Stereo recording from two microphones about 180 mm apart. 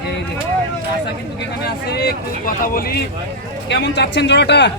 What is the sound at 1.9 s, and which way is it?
Speech, 60° left (ahead or behind).